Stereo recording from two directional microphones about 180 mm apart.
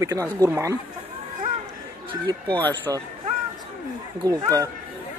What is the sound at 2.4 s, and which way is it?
Speech, 10° left (ahead or behind).